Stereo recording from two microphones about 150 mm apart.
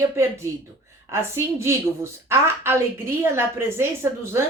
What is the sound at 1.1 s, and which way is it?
A woman's voice, 20° right (ahead or behind).